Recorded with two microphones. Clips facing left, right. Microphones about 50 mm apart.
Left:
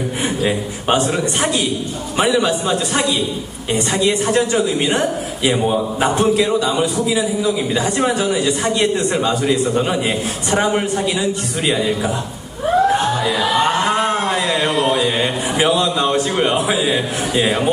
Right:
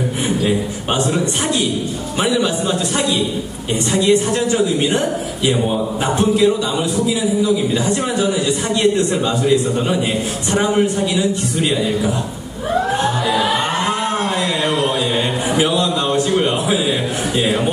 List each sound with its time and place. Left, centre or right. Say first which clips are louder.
0.5 s a man's voice: left 1 dB; left
3.7 s a woman's voice: right 2 dB; left
8.9 s a man's voice: even; left
10.5 s a man's voice: right 1 dB; centre
13.9 s a sound: left 2 dB; left
15.5 s a man's voice: left 1 dB; left